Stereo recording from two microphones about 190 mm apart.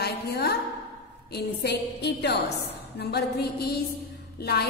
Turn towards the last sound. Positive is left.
turn(degrees=55)  # may be behind; listen again after turning